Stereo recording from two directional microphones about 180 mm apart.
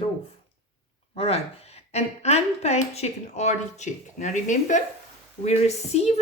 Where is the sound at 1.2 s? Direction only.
35° left (ahead or behind).